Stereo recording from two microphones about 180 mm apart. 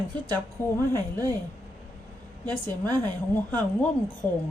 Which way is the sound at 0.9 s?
20° right (ahead or behind).